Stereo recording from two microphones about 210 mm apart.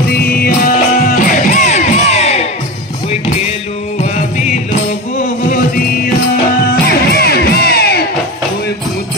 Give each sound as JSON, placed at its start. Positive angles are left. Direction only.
{"t": 0.1, "sound": "music", "side_deg": 45}
{"t": 6.7, "sound": "music", "side_deg": 45}